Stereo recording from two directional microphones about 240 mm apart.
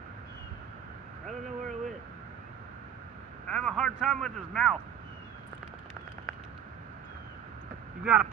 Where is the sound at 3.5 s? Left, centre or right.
Centre.